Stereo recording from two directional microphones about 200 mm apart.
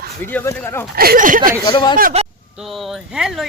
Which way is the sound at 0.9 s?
45° right (ahead or behind).